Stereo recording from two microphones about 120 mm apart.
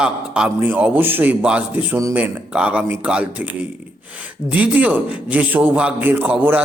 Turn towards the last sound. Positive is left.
turn(degrees=-15)  # may be behind; listen again after turning